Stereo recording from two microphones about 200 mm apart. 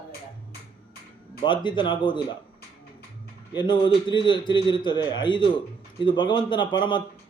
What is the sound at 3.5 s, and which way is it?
Speech, 25° left (ahead or behind).